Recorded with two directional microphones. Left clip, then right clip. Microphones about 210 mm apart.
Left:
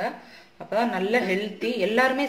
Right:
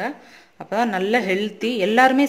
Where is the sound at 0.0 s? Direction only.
50° right (ahead or behind).